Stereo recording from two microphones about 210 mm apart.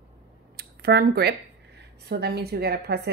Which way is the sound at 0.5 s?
50° right (ahead or behind).